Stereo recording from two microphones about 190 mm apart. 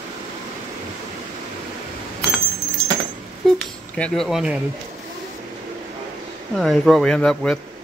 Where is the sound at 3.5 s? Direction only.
5° left (ahead or behind).